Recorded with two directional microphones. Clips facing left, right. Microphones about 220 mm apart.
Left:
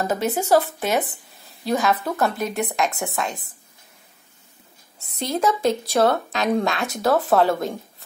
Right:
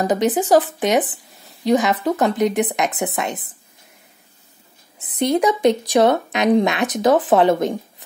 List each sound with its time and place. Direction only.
0.0 s a woman's voice: 15° right (ahead or behind)
4.9 s a woman's voice: 20° right (ahead or behind)